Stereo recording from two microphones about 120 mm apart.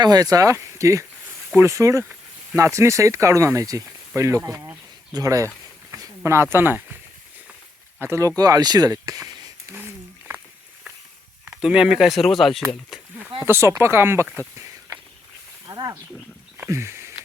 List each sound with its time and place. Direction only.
0.0 s speech: 30° right (ahead or behind)
7.9 s speech: 20° right (ahead or behind)
8.4 s speech: 30° right (ahead or behind)
11.4 s speech: 10° right (ahead or behind)
12.6 s speech: 10° right (ahead or behind)
13.4 s speech: 20° right (ahead or behind)
14.3 s a sound: 25° right (ahead or behind)
15.7 s speech: 30° right (ahead or behind)
16.6 s a sound: 20° right (ahead or behind)